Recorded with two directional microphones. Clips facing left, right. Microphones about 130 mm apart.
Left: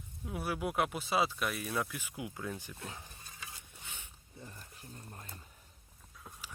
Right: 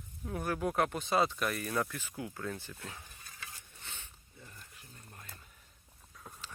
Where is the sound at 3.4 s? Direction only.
10° left (ahead or behind).